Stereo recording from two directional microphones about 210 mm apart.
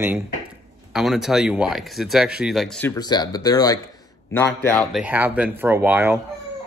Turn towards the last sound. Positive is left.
turn(degrees=-10)  # may be behind; listen again after turning